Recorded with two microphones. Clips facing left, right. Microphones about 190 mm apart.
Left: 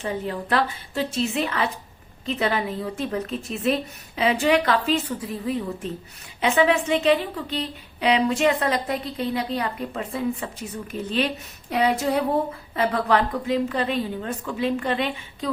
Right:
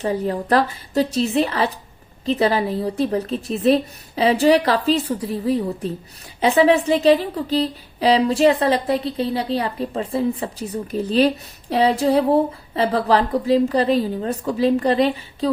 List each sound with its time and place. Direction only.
0.0 s a woman's voice: 40° right (ahead or behind)